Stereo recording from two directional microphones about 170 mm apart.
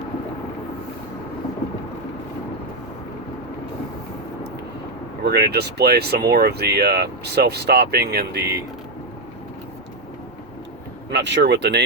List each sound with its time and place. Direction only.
5.2 s speech: 70° right (ahead or behind)
11.1 s speech: 90° right